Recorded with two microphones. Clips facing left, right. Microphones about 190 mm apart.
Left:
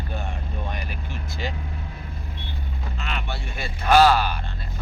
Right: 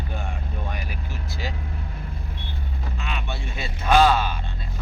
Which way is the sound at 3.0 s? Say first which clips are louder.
Left 1 dB; 10° right (ahead or behind).